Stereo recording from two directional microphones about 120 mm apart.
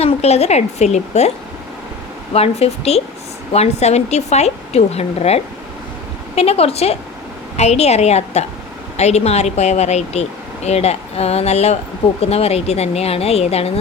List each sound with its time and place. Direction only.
0.0 s speech: 60° left (ahead or behind)
2.3 s speech: 60° left (ahead or behind)